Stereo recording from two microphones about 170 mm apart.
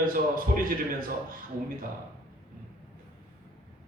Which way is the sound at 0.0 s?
55° right (ahead or behind).